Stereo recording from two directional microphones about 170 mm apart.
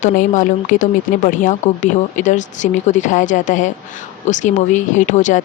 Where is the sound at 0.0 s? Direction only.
50° left (ahead or behind).